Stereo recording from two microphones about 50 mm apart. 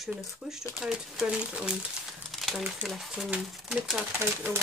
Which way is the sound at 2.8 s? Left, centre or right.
Right.